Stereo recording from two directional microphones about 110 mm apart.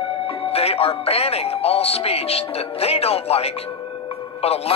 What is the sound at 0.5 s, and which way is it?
Speech, 65° left (ahead or behind).